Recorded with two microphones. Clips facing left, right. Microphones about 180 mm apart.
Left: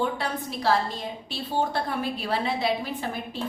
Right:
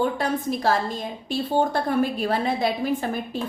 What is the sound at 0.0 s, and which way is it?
Speech, 45° right (ahead or behind).